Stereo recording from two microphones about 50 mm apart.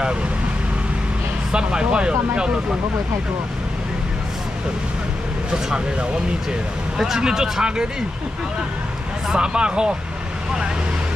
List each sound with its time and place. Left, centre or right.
1.5 s speech: centre
7.0 s speech: centre
9.3 s speech: centre